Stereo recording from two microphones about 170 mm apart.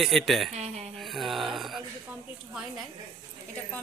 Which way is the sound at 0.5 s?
40° right (ahead or behind).